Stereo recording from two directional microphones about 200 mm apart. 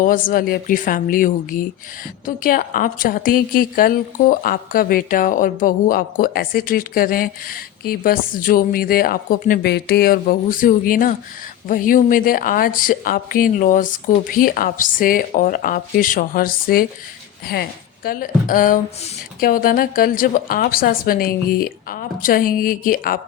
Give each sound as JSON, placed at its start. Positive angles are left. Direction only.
{"t": 0.0, "sound": "a woman's voice", "side_deg": 45}